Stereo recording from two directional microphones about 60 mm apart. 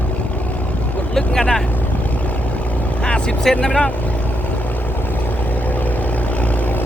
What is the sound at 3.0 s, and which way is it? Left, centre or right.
Vehicle, centre.